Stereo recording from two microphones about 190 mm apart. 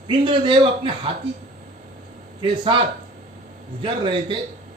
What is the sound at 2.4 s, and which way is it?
A man's voice, 25° right (ahead or behind).